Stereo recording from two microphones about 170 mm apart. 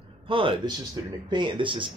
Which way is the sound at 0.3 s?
30° right (ahead or behind).